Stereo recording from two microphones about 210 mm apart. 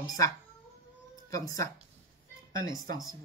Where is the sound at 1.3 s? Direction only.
15° left (ahead or behind).